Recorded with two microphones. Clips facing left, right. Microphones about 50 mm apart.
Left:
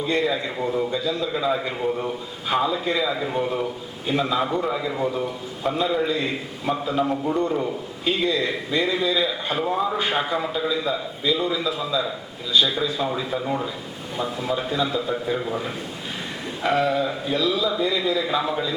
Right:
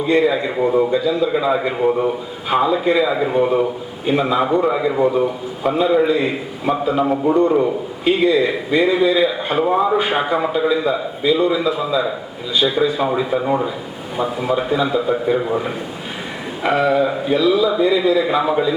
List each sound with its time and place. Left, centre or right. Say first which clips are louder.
0.0 s a man's voice: right 7 dB; centre